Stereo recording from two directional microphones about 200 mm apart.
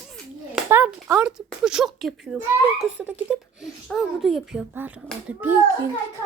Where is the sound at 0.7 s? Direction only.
10° right (ahead or behind).